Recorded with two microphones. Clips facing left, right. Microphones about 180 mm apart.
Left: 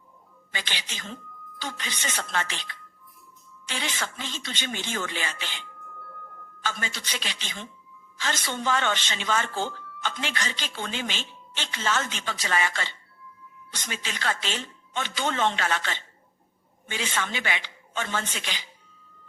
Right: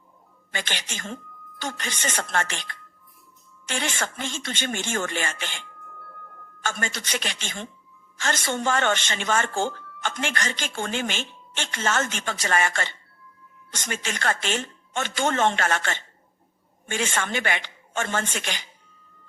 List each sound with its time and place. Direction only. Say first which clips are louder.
0.5 s speech: right 4 dB; 50° right (ahead or behind)